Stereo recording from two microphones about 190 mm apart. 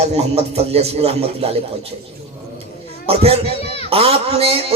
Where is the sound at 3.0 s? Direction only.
30° right (ahead or behind).